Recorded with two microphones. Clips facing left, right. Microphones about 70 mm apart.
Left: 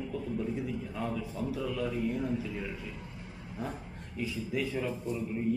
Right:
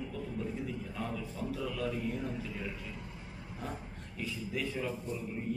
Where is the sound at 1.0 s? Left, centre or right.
Centre.